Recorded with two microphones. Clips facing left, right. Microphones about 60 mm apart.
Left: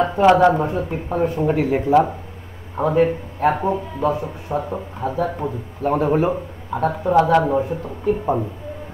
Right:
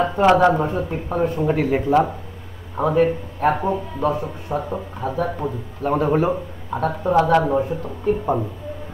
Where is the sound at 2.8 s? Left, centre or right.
Centre.